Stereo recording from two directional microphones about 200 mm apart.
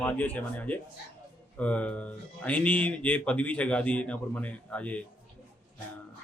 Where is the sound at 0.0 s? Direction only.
10° left (ahead or behind).